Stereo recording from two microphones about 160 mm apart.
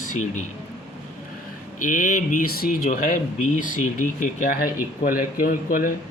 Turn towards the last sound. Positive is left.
turn(degrees=60)  # may be behind; listen again after turning